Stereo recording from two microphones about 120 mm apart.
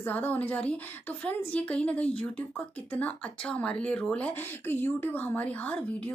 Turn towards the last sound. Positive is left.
turn(degrees=10)  # may be behind; listen again after turning